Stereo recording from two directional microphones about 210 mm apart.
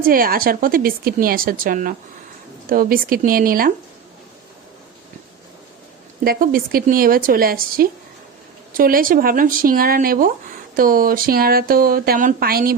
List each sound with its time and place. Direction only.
0.0 s speech: 45° right (ahead or behind)
6.2 s speech: 45° right (ahead or behind)